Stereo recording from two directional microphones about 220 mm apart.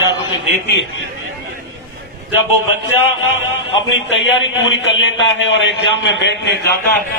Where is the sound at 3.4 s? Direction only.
60° left (ahead or behind).